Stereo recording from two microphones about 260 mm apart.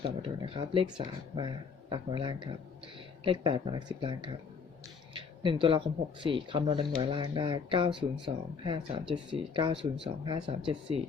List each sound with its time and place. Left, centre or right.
0.2 s speech: centre
5.1 s a sound: centre
6.2 s speech: centre